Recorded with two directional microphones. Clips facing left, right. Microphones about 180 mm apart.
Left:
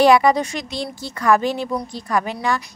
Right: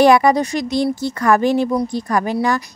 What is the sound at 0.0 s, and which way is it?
Speech, 45° right (ahead or behind).